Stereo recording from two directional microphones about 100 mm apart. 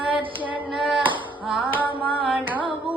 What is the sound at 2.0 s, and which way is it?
Carnatic music, 15° right (ahead or behind).